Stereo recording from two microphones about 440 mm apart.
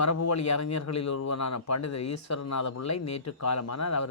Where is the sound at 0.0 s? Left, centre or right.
Left.